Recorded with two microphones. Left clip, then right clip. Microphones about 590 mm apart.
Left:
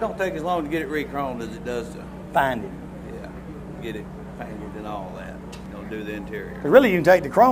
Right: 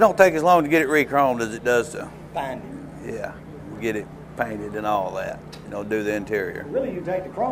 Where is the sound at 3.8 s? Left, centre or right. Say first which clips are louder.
Right 8 dB; right.